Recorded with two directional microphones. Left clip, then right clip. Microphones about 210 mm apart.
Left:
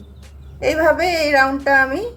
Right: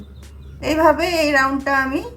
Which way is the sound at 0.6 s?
25° left (ahead or behind).